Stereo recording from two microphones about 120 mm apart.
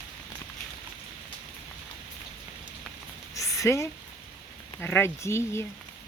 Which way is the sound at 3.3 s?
25° left (ahead or behind).